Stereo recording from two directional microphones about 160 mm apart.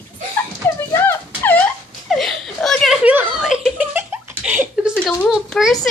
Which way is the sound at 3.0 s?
5° right (ahead or behind).